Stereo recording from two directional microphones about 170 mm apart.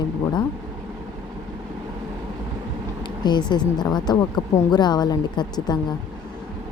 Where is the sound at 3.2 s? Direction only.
25° left (ahead or behind).